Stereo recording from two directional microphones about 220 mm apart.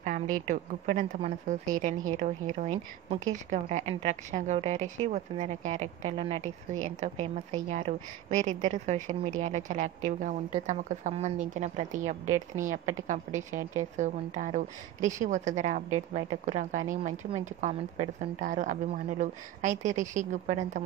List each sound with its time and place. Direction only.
0.0 s a woman's voice: 35° right (ahead or behind)
7.7 s a woman's voice: 35° right (ahead or behind)